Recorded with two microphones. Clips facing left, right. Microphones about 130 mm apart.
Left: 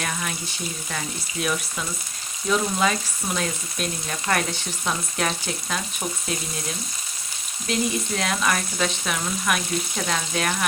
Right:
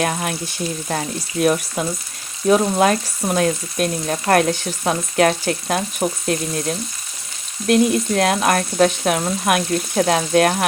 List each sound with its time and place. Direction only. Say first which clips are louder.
0.0 s speech: right 8 dB; 55° right (ahead or behind)
2.5 s frying: right 8 dB; 55° right (ahead or behind)
9.6 s frying: right 9 dB; 60° right (ahead or behind)